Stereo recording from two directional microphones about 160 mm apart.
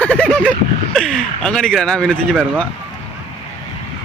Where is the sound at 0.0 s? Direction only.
10° left (ahead or behind).